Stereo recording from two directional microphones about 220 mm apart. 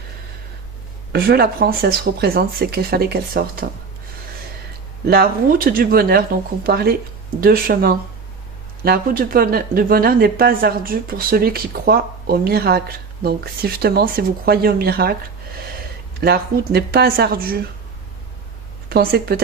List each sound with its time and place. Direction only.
1.1 s speech: 45° right (ahead or behind)
5.0 s speech: 45° right (ahead or behind)
16.2 s speech: 45° right (ahead or behind)
18.9 s speech: 45° right (ahead or behind)